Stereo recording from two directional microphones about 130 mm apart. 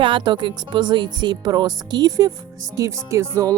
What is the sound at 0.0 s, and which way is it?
Speech, 40° right (ahead or behind).